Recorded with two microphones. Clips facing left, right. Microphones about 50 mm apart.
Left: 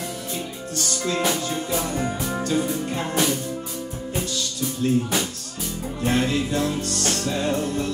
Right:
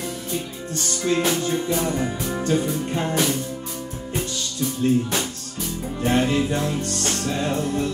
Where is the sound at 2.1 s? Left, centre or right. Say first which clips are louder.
Right 1 dB; centre.